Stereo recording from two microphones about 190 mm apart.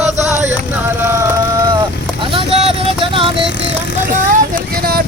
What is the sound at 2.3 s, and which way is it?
Vehicle, 30° right (ahead or behind).